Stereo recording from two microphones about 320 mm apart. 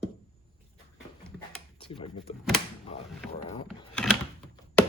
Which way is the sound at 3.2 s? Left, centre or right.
Centre.